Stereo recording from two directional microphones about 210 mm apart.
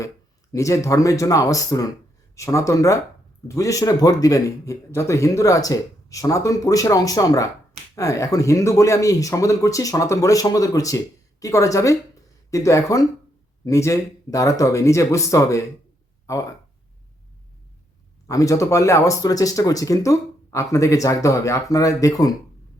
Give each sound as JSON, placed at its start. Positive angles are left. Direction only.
{"t": 0.5, "sound": "speech", "side_deg": 15}
{"t": 18.3, "sound": "speech", "side_deg": 15}